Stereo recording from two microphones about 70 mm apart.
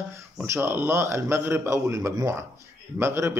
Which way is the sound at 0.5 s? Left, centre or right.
Right.